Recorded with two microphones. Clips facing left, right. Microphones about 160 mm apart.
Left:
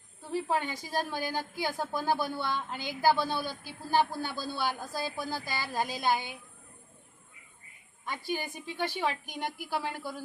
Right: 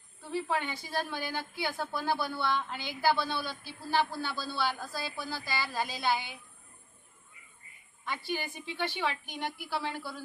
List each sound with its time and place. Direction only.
0.3 s a woman's voice: 40° left (ahead or behind)
8.0 s a woman's voice: 45° left (ahead or behind)